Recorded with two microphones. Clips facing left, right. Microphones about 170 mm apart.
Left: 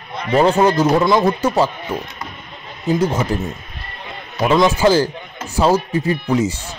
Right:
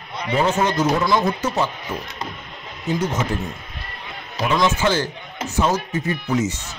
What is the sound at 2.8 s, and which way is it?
Speech, 30° left (ahead or behind).